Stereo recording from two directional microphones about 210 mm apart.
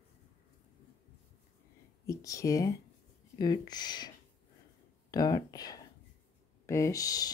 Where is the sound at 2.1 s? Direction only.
15° left (ahead or behind).